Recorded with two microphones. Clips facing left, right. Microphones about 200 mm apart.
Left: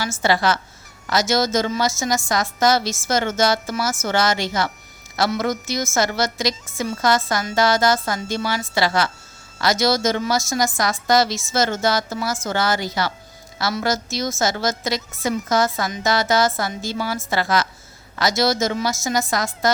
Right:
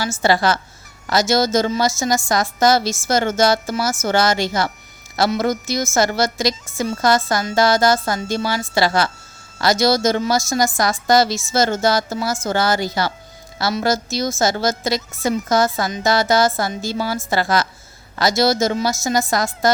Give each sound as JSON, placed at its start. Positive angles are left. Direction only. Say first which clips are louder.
{"t": 0.0, "sound": "a woman's voice", "louder": "right 2 dB", "side_deg": -35}